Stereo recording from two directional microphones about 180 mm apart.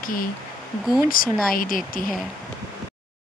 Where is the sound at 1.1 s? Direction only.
50° left (ahead or behind).